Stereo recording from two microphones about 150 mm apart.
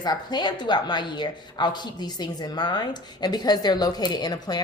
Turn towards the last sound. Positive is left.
turn(degrees=25)  # may be behind; listen again after turning